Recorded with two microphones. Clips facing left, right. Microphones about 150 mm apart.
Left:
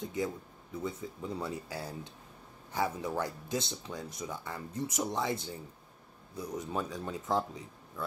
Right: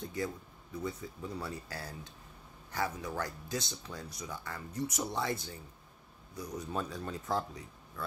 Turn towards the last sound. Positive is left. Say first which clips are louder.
# left 2 dB
turn(degrees=15)  # may be behind; listen again after turning